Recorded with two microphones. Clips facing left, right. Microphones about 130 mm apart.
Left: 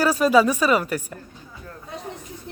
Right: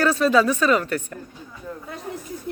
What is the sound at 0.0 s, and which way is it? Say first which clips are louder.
Speech: left 1 dB; 10° left (ahead or behind).